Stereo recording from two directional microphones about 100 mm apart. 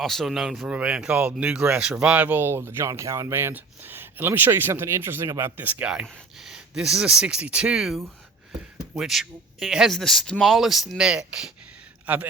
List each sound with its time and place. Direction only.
0.0 s speech: centre (ahead or behind)
0.7 s speech: 10° right (ahead or behind)